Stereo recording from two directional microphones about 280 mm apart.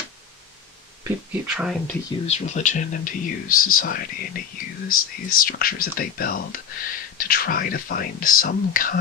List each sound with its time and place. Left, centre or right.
1.0 s speech: centre
2.0 s speech: left